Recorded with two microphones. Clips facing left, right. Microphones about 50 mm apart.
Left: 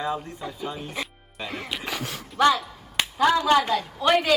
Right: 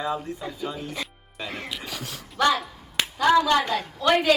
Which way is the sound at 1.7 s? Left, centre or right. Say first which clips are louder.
Left 4 dB; left.